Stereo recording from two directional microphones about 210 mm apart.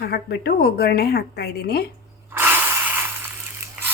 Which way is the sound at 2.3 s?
10° right (ahead or behind).